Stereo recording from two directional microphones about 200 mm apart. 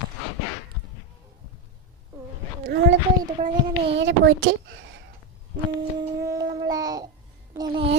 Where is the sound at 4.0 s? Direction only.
65° right (ahead or behind).